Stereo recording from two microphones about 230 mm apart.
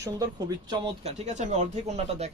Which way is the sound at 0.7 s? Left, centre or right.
Right.